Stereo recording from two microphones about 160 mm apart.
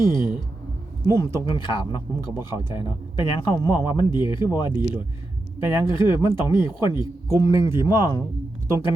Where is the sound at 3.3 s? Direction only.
30° left (ahead or behind).